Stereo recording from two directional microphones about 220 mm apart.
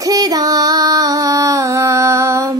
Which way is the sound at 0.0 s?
15° right (ahead or behind).